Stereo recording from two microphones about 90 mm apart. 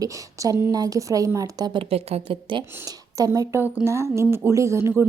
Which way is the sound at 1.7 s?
90° right.